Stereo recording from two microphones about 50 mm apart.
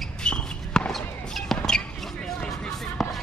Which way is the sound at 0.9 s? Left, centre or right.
Centre.